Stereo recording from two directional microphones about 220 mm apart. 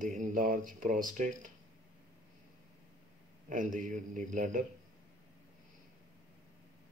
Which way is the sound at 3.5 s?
35° right (ahead or behind).